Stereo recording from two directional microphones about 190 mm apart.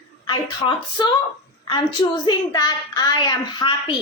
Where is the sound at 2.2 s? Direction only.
20° left (ahead or behind).